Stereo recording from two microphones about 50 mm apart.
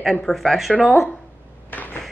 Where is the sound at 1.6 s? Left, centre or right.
Left.